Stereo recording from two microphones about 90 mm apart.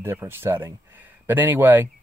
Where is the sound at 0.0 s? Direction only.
25° right (ahead or behind).